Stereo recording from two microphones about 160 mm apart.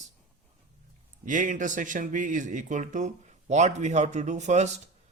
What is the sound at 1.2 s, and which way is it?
A man's voice, 55° right (ahead or behind).